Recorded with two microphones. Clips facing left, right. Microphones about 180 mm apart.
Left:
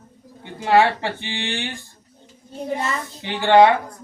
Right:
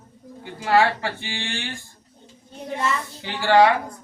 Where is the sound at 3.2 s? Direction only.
20° left (ahead or behind).